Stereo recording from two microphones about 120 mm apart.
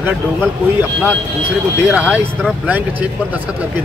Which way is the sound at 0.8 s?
10° right (ahead or behind).